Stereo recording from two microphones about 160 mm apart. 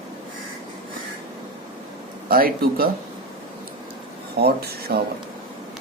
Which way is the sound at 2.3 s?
70° right (ahead or behind).